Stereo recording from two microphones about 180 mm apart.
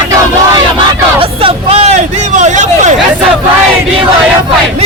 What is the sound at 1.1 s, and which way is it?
Hubbub, 30° right (ahead or behind).